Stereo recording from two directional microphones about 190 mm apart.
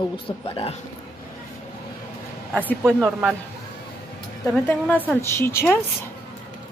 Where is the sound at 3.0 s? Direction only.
5° right (ahead or behind).